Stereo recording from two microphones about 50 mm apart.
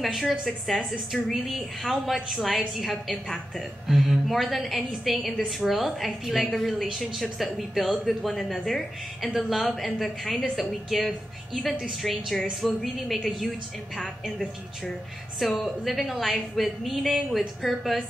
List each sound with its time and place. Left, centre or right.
0.0 s a woman's voice: centre
15.6 s a woman's voice: centre